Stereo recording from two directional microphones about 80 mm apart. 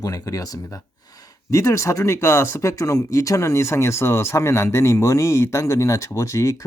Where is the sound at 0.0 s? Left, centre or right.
Left.